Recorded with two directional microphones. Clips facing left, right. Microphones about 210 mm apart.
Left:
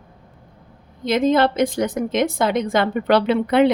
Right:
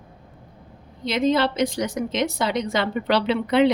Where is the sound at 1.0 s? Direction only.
50° left (ahead or behind).